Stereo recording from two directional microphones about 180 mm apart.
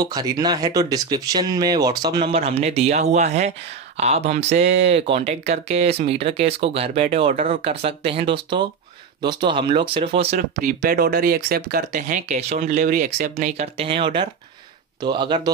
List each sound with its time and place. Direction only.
0.0 s speech: 20° right (ahead or behind)
10.3 s speech: 55° right (ahead or behind)
13.7 s speech: 30° right (ahead or behind)